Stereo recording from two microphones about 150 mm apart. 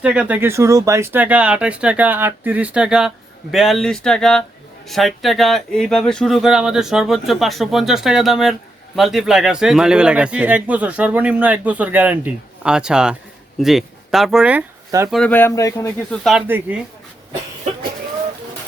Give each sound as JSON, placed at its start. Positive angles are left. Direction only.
{"t": 0.0, "sound": "speech", "side_deg": -10}
{"t": 14.8, "sound": "speech", "side_deg": -20}
{"t": 15.1, "sound": "speech", "side_deg": 10}
{"t": 16.0, "sound": "speech", "side_deg": 0}
{"t": 16.5, "sound": "speech", "side_deg": -10}